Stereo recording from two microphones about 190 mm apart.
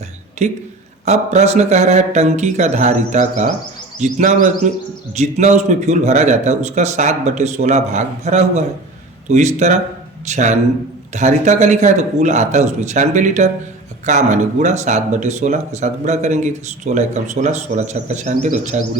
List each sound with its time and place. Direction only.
0.4 s speech: 35° right (ahead or behind)